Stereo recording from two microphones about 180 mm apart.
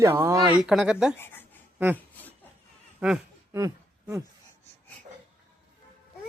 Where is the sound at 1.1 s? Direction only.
10° left (ahead or behind).